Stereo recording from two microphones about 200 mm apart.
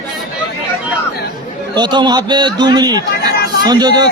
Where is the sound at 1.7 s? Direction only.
20° right (ahead or behind).